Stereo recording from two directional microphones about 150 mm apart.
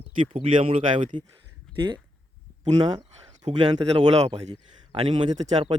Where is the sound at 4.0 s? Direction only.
40° right (ahead or behind).